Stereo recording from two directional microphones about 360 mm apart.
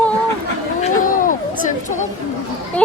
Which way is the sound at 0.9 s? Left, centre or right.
Left.